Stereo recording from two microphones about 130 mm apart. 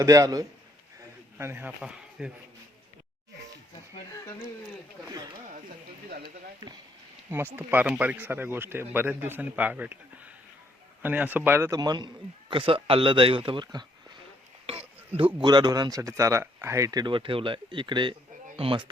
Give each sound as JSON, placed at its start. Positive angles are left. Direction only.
{"t": 0.0, "sound": "a man's voice", "side_deg": -25}
{"t": 1.8, "sound": "speech", "side_deg": -5}
{"t": 5.0, "sound": "speech", "side_deg": -30}
{"t": 7.3, "sound": "speech", "side_deg": -15}
{"t": 11.8, "sound": "speech", "side_deg": -35}
{"t": 14.7, "sound": "a sound", "side_deg": -45}
{"t": 15.4, "sound": "speech", "side_deg": -35}